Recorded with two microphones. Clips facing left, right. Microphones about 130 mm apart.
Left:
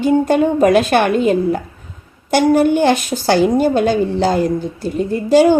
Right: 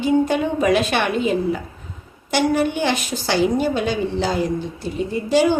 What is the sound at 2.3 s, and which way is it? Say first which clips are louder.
A woman's voice: left 7 dB; 45° left (ahead or behind).